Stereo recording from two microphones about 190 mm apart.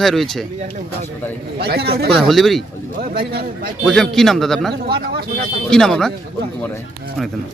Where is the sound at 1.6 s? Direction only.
55° right (ahead or behind).